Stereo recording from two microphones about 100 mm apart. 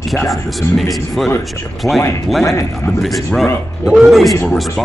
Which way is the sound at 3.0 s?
Centre (ahead or behind).